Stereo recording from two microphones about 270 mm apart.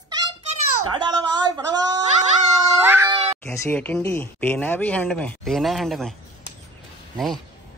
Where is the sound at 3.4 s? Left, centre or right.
Centre.